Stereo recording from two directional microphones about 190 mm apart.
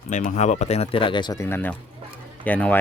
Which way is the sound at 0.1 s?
40° left (ahead or behind).